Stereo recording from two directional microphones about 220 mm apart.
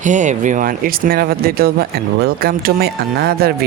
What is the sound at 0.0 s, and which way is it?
Speech, 35° right (ahead or behind).